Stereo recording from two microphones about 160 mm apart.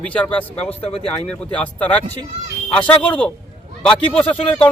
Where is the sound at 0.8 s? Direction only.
40° left (ahead or behind).